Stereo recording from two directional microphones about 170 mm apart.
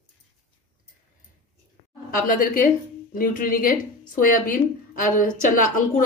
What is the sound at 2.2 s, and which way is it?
A woman's voice, 55° left (ahead or behind).